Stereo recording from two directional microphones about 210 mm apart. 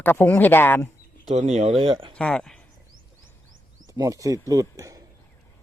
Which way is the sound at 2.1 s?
5° left (ahead or behind).